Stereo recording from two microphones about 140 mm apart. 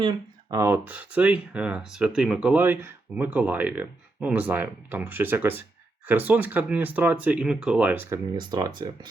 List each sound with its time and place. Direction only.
0.0 s speech: 35° right (ahead or behind)
0.6 s speech: 15° right (ahead or behind)
8.4 s speech: 30° right (ahead or behind)